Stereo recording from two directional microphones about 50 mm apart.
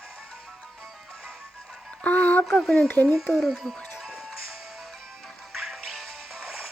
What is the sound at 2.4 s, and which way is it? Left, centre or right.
Speech, centre.